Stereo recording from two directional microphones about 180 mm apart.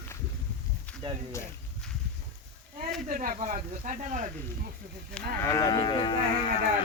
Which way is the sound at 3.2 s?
45° right (ahead or behind).